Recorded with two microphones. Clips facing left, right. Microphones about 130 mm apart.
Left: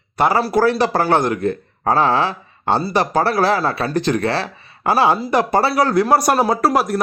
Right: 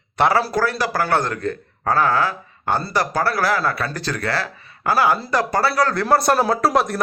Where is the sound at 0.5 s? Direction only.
20° left (ahead or behind).